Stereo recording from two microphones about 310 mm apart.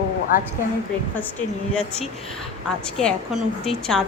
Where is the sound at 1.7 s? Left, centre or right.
Centre.